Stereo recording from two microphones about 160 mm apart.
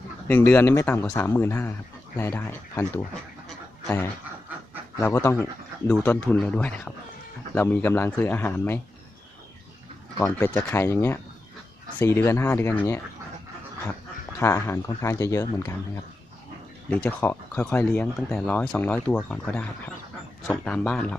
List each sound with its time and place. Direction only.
0.3 s speech: 15° left (ahead or behind)
3.8 s speech: 15° left (ahead or behind)
10.2 s speech: 15° left (ahead or behind)
14.3 s speech: 15° left (ahead or behind)
16.9 s speech: 10° left (ahead or behind)